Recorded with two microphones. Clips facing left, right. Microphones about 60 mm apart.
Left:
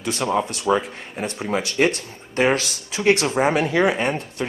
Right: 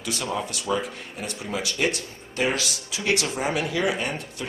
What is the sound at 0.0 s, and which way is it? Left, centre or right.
Speech, left.